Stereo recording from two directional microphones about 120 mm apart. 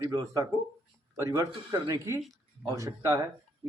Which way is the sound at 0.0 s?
30° right (ahead or behind).